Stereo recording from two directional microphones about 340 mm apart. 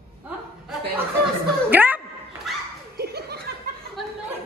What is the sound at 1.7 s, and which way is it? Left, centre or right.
Speech, centre.